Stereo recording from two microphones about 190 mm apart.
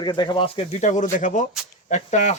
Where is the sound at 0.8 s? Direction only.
40° left (ahead or behind).